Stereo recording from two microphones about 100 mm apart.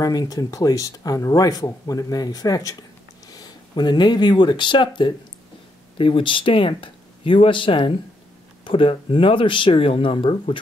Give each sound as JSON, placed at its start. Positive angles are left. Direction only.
{"t": 0.0, "sound": "speech", "side_deg": 40}
{"t": 3.7, "sound": "speech", "side_deg": 45}